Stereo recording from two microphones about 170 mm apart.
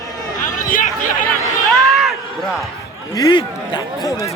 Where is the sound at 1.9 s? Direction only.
Centre (ahead or behind).